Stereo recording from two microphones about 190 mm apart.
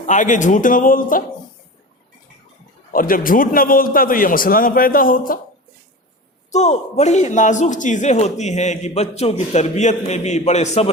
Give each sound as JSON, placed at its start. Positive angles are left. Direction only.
{"t": 0.0, "sound": "a man's voice", "side_deg": 40}
{"t": 2.9, "sound": "a man's voice", "side_deg": 45}
{"t": 6.5, "sound": "a man's voice", "side_deg": 35}